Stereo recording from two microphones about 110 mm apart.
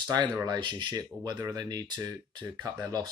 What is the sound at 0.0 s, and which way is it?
Speech, 45° right (ahead or behind).